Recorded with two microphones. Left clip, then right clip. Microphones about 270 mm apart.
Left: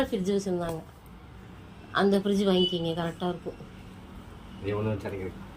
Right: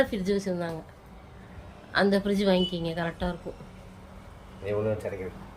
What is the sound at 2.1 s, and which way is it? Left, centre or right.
A woman's voice, centre.